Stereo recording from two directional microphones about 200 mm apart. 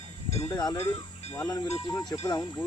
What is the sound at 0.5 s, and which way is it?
Speech, 15° left (ahead or behind).